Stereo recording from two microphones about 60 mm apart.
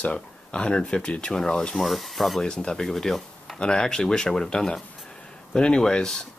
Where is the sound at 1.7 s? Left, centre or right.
Centre.